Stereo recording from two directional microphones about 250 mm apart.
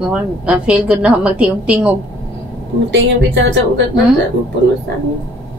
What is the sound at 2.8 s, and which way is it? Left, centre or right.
Speech, right.